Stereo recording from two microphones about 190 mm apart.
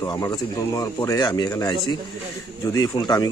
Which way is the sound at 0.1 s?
20° left (ahead or behind).